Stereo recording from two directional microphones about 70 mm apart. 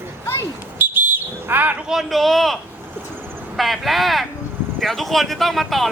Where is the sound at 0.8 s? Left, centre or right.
Right.